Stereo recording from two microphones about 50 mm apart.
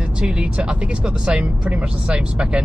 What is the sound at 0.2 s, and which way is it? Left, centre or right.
Speech, right.